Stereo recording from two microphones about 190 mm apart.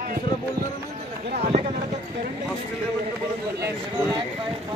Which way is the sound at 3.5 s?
15° right (ahead or behind).